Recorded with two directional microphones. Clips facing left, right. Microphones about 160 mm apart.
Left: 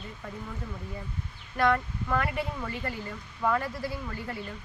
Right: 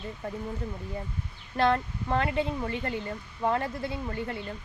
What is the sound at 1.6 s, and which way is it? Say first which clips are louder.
Speech: right 1 dB; 25° right (ahead or behind).